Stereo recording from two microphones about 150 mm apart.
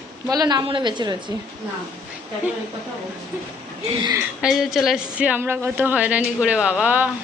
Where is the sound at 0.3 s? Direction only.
25° right (ahead or behind).